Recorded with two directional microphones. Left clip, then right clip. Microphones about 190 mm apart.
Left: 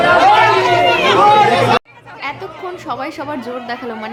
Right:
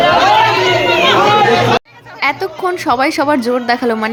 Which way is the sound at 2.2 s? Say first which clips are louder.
Right 9 dB; 40° right (ahead or behind).